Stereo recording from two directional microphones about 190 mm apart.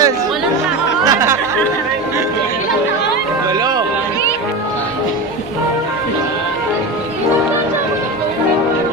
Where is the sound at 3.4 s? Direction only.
20° right (ahead or behind).